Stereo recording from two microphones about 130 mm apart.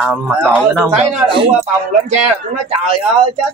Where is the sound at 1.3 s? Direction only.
45° right (ahead or behind).